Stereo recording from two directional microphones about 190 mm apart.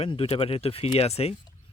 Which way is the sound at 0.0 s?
30° left (ahead or behind).